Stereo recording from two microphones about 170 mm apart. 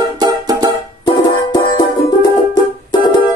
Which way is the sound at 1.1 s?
25° left (ahead or behind).